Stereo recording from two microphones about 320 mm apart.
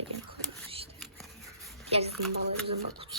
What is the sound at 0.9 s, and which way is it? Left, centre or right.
Scissors, centre.